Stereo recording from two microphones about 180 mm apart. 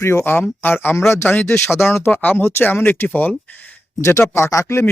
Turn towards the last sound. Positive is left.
turn(degrees=15)  # may be behind; listen again after turning